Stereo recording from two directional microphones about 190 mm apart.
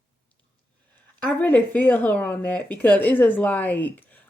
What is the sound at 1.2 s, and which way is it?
Speech, 10° left (ahead or behind).